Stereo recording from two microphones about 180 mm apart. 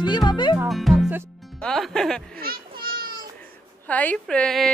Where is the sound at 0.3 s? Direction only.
25° left (ahead or behind).